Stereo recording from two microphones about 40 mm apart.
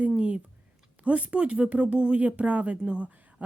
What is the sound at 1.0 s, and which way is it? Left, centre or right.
Speech, right.